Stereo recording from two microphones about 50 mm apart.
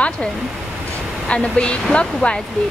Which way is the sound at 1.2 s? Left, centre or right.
Left.